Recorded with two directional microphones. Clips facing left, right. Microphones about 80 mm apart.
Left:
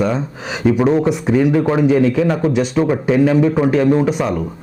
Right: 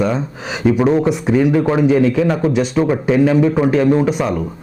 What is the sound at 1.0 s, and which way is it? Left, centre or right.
A man's voice, centre.